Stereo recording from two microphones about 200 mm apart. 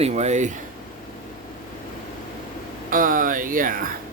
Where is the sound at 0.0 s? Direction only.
35° right (ahead or behind).